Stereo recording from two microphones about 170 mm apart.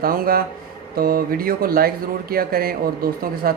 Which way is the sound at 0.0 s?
60° right (ahead or behind).